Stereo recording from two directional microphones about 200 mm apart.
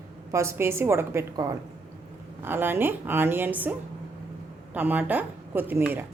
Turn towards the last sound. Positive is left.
turn(degrees=-10)  # may be behind; listen again after turning